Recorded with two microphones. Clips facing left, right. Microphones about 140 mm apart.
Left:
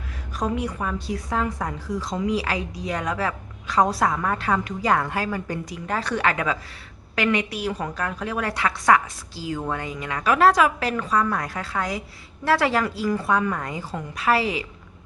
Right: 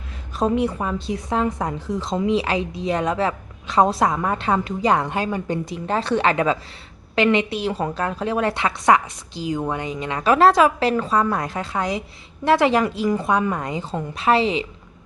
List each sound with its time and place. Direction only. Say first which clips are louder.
0.3 s a woman's voice: right 6 dB; 25° right (ahead or behind)